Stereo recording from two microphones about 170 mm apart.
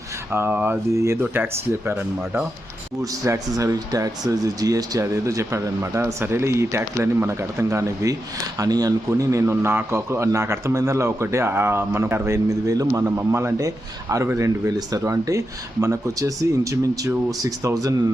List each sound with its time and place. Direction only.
0.3 s a man's voice: 10° right (ahead or behind)
3.0 s a man's voice: 20° right (ahead or behind)